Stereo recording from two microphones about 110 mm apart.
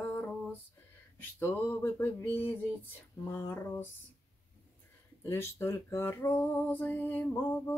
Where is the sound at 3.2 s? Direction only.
20° left (ahead or behind).